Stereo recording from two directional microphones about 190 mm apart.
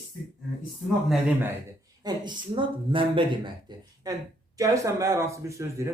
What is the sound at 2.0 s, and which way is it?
Speech, 25° right (ahead or behind).